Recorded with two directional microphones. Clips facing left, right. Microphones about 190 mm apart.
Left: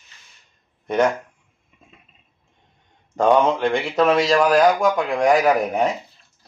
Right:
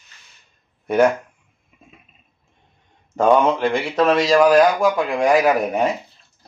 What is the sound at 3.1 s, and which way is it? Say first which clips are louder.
Speech: right 1 dB; 5° right (ahead or behind).